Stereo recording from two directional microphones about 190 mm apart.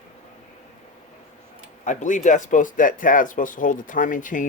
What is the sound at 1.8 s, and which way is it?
Speech, 40° left (ahead or behind).